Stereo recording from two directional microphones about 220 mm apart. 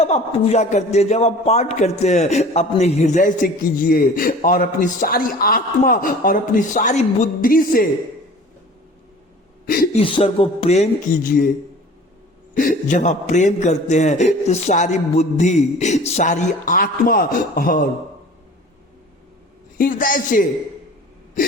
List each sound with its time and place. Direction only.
0.0 s a man's voice: 30° left (ahead or behind)
9.6 s a man's voice: 40° left (ahead or behind)
10.0 s speech: 25° left (ahead or behind); by 11.4 s 40° left (ahead or behind)
12.5 s a man's voice: 35° left (ahead or behind)
19.8 s a man's voice: 40° left (ahead or behind)